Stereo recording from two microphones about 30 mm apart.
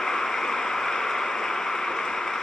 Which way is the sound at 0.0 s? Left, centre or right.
Centre.